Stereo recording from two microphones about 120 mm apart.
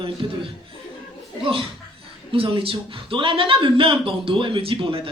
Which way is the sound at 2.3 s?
50° right (ahead or behind).